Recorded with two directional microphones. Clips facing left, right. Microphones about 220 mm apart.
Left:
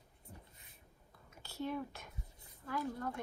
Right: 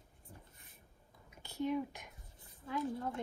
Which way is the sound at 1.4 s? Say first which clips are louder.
Right 4 dB; 15° right (ahead or behind).